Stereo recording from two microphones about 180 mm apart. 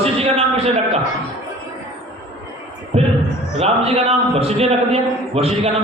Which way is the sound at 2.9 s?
35° right (ahead or behind).